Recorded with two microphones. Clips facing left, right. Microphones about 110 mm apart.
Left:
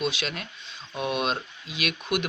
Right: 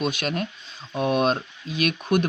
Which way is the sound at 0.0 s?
45° right (ahead or behind).